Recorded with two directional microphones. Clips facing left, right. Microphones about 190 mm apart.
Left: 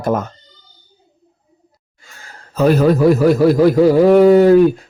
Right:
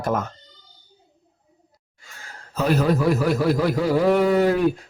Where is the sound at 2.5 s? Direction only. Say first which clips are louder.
Left 8 dB; 40° left (ahead or behind).